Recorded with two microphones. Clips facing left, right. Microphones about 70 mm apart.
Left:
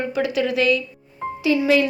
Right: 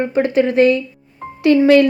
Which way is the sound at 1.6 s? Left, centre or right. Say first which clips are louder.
Right 8 dB; right.